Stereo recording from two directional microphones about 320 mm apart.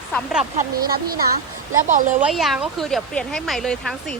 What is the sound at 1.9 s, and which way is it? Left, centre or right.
Speech, right.